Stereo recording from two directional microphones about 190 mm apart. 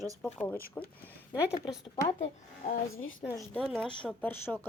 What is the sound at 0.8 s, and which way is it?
Speech, 15° left (ahead or behind).